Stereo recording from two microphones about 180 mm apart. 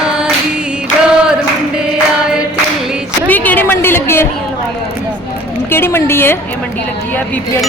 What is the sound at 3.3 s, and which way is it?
Speech, 10° left (ahead or behind).